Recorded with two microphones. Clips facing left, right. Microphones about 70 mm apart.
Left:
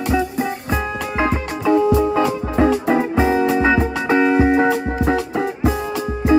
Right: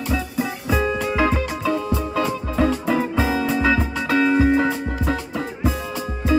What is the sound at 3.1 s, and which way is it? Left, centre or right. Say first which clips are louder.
Music: left 5 dB; left.